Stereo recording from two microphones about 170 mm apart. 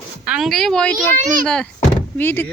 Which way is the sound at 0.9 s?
50° right (ahead or behind).